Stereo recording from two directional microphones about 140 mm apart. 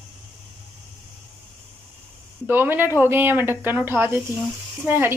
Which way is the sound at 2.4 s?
15° right (ahead or behind).